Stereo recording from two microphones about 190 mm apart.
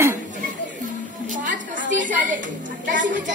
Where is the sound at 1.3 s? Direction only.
40° right (ahead or behind).